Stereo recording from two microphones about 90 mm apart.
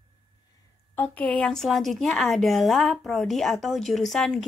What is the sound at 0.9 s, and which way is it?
Speech, 20° left (ahead or behind).